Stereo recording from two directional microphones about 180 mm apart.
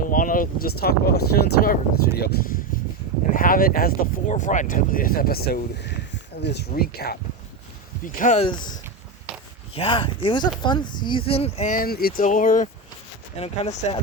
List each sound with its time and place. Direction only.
0.1 s speech: 50° left (ahead or behind)
8.0 s speech: 45° left (ahead or behind)
9.7 s speech: 30° left (ahead or behind)
11.7 s speech: 55° left (ahead or behind)
13.3 s speech: 35° left (ahead or behind)